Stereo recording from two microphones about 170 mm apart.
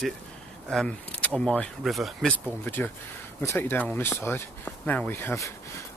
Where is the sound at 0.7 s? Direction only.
5° left (ahead or behind).